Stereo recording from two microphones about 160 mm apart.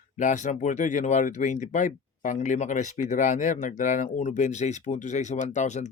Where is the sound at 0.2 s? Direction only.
50° left (ahead or behind).